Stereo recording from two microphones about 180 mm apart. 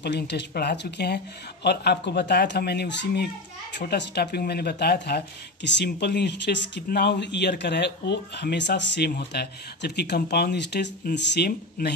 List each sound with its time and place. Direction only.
0.0 s speech: 70° left (ahead or behind)